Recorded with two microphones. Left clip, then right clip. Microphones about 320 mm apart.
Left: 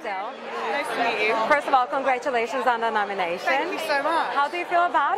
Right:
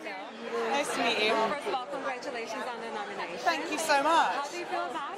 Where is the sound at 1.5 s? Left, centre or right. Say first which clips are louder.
Left 13 dB; left.